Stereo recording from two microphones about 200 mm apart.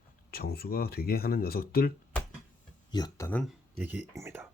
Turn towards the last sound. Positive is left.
turn(degrees=-10)  # may be behind; listen again after turning